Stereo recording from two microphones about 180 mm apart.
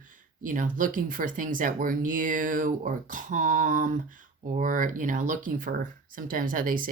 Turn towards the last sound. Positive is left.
turn(degrees=-50)  # may be behind; listen again after turning